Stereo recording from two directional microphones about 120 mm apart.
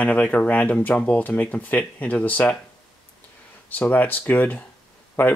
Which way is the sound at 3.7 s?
15° left (ahead or behind).